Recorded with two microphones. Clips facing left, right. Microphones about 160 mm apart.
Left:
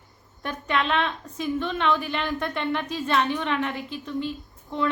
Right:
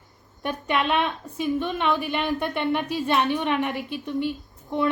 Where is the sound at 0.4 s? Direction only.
15° right (ahead or behind).